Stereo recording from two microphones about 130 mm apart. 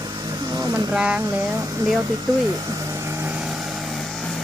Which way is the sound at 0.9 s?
10° right (ahead or behind).